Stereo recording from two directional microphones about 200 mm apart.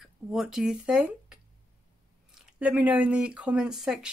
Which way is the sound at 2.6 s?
5° right (ahead or behind).